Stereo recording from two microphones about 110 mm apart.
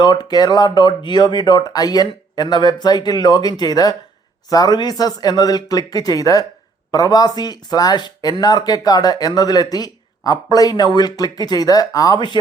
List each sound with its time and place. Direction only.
0.0 s speech: 40° left (ahead or behind)